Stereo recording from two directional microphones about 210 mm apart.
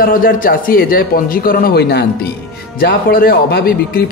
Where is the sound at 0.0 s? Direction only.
45° left (ahead or behind).